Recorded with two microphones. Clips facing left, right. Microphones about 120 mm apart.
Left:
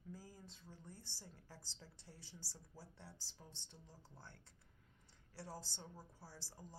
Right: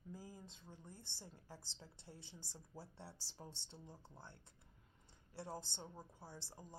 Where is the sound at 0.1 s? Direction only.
20° right (ahead or behind).